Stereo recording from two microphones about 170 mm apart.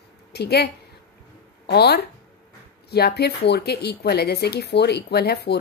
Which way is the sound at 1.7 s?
75° left (ahead or behind).